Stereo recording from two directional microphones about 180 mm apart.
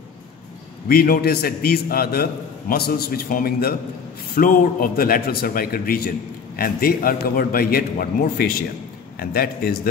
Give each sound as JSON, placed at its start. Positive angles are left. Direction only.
{"t": 0.8, "sound": "a man's voice", "side_deg": 55}